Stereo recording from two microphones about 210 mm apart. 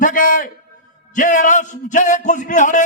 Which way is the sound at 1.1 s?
35° left (ahead or behind).